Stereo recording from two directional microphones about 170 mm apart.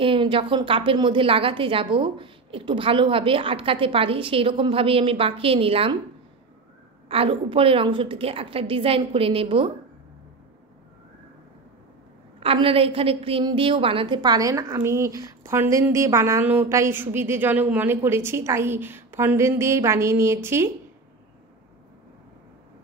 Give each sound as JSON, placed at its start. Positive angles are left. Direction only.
{"t": 0.0, "sound": "a woman's voice", "side_deg": -30}
{"t": 7.1, "sound": "a woman's voice", "side_deg": -30}
{"t": 12.4, "sound": "a woman's voice", "side_deg": -30}